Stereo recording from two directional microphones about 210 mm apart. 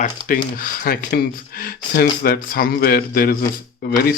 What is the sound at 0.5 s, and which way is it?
Speech, 45° left (ahead or behind).